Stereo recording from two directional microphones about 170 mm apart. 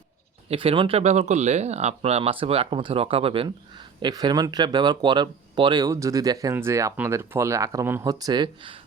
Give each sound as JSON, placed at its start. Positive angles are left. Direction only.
{"t": 0.4, "sound": "speech", "side_deg": -35}